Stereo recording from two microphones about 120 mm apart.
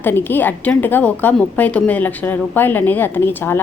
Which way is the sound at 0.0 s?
15° left (ahead or behind).